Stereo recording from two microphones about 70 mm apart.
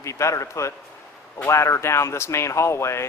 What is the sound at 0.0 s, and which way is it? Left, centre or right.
Speech, left.